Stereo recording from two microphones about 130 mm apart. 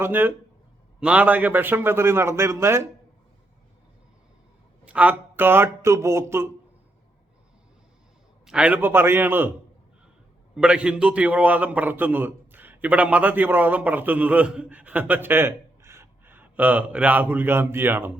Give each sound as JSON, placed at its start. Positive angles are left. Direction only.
{"t": 0.0, "sound": "a man's voice", "side_deg": -15}
{"t": 4.9, "sound": "a man's voice", "side_deg": -10}
{"t": 8.4, "sound": "a man's voice", "side_deg": -10}
{"t": 10.5, "sound": "a man's voice", "side_deg": -5}